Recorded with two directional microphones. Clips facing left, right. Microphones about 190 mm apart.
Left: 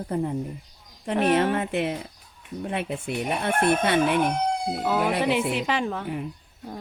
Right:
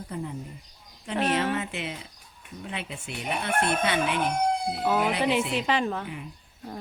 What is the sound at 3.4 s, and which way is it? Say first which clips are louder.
Chicken: left 3 dB; 50° left (ahead or behind).